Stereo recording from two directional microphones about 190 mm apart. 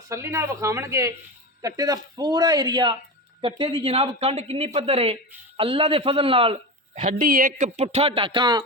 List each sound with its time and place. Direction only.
0.1 s speech: 15° right (ahead or behind); by 7.7 s 45° right (ahead or behind)
7.8 s speech: 30° right (ahead or behind)